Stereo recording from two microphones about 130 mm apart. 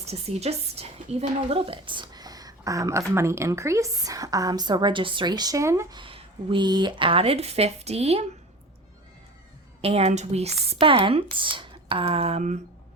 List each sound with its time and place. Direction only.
0.0 s a woman's voice: 55° right (ahead or behind); by 6.0 s 20° right (ahead or behind)
6.0 s speech: 45° right (ahead or behind)
9.8 s speech: 55° right (ahead or behind)